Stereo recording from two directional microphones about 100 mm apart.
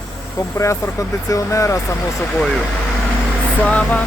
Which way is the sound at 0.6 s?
30° left (ahead or behind).